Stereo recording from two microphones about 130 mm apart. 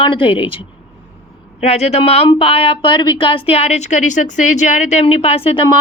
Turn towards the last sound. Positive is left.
turn(degrees=45)  # may be behind; listen again after turning